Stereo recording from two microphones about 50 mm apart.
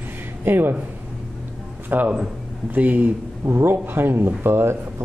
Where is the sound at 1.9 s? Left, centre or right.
Right.